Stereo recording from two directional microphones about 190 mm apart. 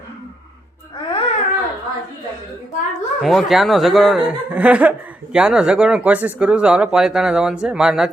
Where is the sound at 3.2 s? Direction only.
Centre (ahead or behind).